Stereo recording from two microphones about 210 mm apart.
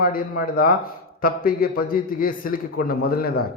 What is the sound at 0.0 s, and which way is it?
A man's voice, 45° left (ahead or behind).